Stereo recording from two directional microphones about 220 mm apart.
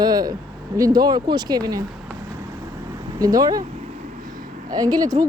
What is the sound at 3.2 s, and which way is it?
Speech, 15° right (ahead or behind).